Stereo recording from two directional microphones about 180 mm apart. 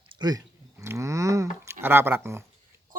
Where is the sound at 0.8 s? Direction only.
15° right (ahead or behind).